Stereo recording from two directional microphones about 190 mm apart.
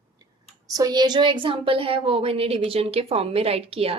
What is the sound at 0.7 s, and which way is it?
Speech, 20° right (ahead or behind).